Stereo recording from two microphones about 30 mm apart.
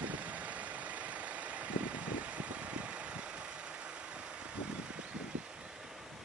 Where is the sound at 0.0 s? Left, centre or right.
Right.